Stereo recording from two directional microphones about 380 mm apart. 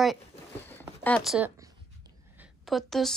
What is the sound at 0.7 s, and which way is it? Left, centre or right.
Speech, centre.